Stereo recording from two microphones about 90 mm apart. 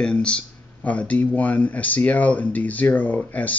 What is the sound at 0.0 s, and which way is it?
Speech, 10° left (ahead or behind).